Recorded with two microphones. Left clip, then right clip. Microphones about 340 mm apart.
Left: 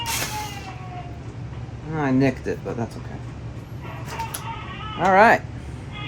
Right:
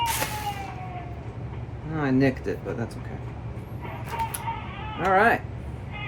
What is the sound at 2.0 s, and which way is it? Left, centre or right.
Speech, centre.